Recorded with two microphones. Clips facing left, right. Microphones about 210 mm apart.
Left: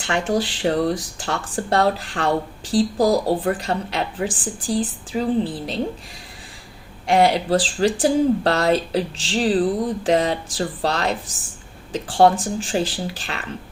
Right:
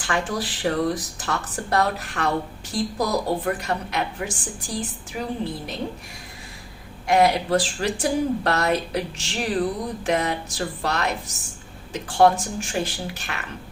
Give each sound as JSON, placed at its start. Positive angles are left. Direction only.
{"t": 0.0, "sound": "speech", "side_deg": 25}
{"t": 7.1, "sound": "speech", "side_deg": 30}